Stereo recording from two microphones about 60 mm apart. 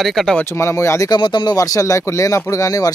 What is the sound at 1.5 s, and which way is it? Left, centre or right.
Speech, left.